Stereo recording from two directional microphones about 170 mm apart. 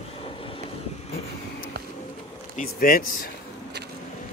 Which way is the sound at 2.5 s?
55° left (ahead or behind).